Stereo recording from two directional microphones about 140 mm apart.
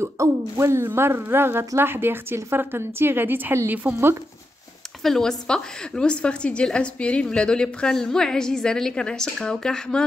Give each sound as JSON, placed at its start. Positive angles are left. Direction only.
{"t": 0.0, "sound": "a woman's voice", "side_deg": -20}
{"t": 5.0, "sound": "a woman's voice", "side_deg": 0}